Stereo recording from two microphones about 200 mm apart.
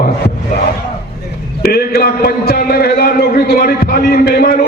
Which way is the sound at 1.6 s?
50° left (ahead or behind).